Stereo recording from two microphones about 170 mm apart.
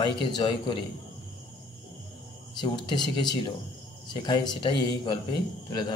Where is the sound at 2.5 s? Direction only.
25° left (ahead or behind).